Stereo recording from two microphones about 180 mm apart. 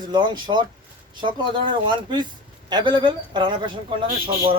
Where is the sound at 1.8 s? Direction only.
25° right (ahead or behind).